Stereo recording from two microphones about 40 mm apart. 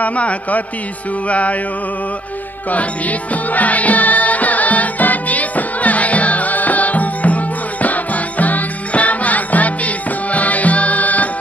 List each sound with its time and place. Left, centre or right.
0.0 s a man's voice: left
2.7 s music: left